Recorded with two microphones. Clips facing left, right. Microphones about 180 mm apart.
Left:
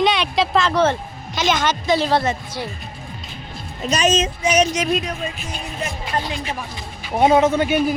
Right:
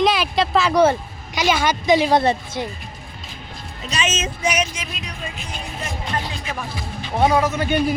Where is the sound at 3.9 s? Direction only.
40° left (ahead or behind).